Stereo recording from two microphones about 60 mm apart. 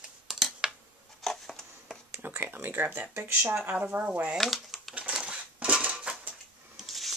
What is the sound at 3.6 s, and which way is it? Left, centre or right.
Speech, right.